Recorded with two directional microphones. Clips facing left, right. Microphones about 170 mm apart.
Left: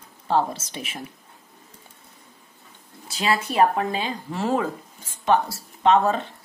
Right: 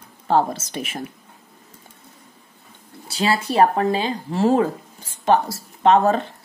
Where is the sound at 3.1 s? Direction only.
30° right (ahead or behind).